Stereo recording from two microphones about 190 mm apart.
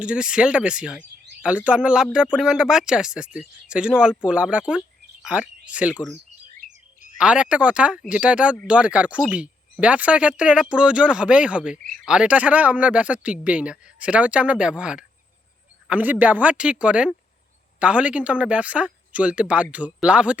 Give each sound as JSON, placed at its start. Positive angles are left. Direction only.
{"t": 0.0, "sound": "speech", "side_deg": -5}
{"t": 6.6, "sound": "bird", "side_deg": -45}
{"t": 7.2, "sound": "speech", "side_deg": -5}